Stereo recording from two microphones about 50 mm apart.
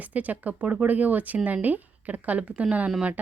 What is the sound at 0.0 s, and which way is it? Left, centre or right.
Speech, right.